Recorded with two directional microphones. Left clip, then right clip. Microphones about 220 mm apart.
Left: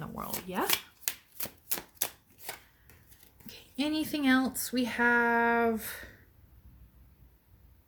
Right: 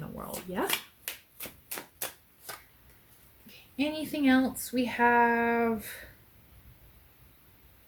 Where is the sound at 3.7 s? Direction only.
45° left (ahead or behind).